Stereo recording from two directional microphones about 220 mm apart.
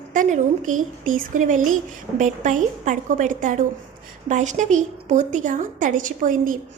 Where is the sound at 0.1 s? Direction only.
35° right (ahead or behind).